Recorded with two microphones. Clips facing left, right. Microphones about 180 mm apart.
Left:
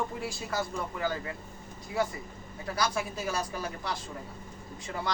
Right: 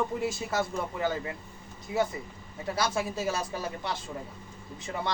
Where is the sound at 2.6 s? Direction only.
25° right (ahead or behind).